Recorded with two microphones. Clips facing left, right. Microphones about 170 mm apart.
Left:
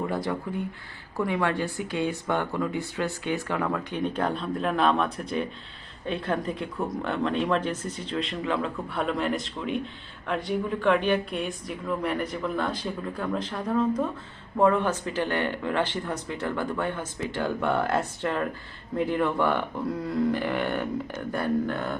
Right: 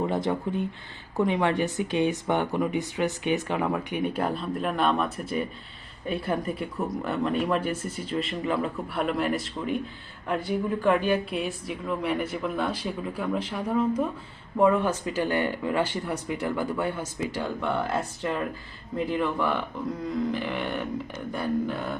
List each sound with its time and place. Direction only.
0.0 s a man's voice: 25° right (ahead or behind); by 21.9 s centre (ahead or behind)